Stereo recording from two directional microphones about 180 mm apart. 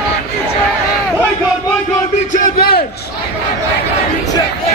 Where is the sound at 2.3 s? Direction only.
50° left (ahead or behind).